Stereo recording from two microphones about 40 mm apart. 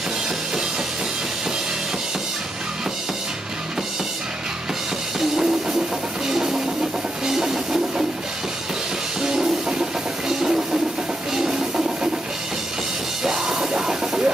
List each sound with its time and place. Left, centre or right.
5.3 s music: centre
6.2 s train: centre
9.2 s music: centre
11.3 s a sound: centre
13.2 s music: centre